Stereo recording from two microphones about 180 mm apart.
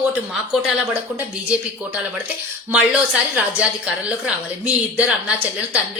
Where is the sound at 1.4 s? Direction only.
5° right (ahead or behind).